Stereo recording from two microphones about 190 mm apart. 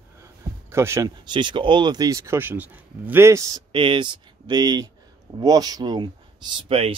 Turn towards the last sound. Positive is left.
turn(degrees=-30)  # may be behind; listen again after turning